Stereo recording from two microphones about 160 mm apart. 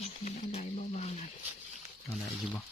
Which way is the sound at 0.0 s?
45° left (ahead or behind).